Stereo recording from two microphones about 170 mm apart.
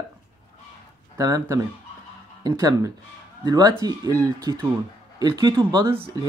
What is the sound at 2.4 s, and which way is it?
Speech, 20° right (ahead or behind).